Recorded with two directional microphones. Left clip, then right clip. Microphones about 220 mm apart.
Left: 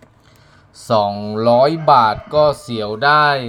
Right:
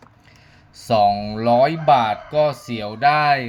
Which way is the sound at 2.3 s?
10° left (ahead or behind).